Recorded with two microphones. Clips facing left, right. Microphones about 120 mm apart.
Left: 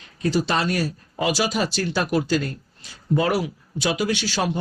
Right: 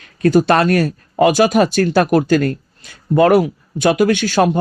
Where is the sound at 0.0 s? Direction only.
55° right (ahead or behind).